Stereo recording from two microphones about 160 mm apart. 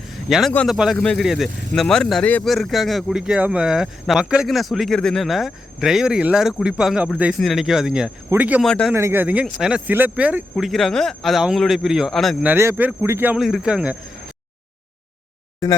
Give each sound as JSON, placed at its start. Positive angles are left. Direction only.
{"t": 0.1, "sound": "a sound", "side_deg": 0}
{"t": 0.5, "sound": "speech", "side_deg": 5}
{"t": 8.6, "sound": "speech", "side_deg": 5}
{"t": 8.9, "sound": "speech", "side_deg": -15}
{"t": 12.5, "sound": "speech", "side_deg": -15}